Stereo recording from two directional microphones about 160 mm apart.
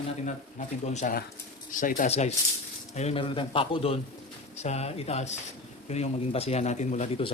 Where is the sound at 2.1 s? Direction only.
40° left (ahead or behind).